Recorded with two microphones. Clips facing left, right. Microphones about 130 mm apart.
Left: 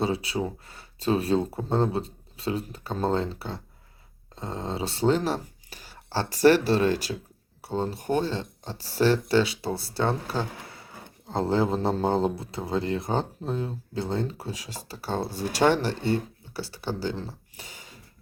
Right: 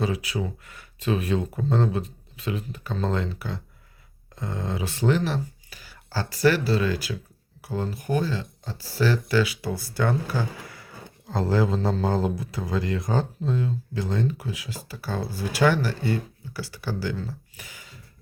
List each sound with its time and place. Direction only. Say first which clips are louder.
0.0 s speech: left 1 dB; 30° left (ahead or behind)